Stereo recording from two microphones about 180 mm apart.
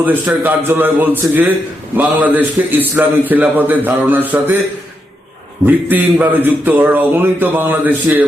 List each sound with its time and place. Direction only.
0.0 s a man's voice: 10° right (ahead or behind)
5.6 s a man's voice: 10° right (ahead or behind)